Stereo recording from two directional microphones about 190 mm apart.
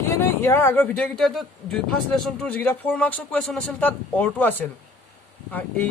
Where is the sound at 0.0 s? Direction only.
15° left (ahead or behind).